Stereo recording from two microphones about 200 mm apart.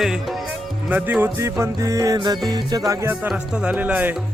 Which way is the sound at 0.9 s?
10° right (ahead or behind).